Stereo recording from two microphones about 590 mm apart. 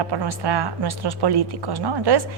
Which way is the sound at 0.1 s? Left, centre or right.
Right.